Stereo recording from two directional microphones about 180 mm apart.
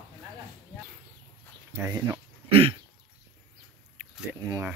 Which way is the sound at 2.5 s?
30° right (ahead or behind).